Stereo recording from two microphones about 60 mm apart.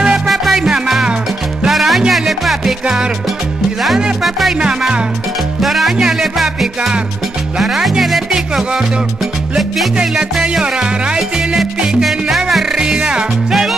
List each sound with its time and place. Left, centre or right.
0.3 s music: centre
4.6 s music: centre
5.6 s music: centre
9.9 s music: centre
12.7 s music: centre